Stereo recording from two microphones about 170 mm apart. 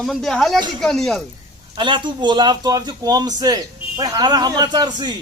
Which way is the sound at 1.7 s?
25° right (ahead or behind).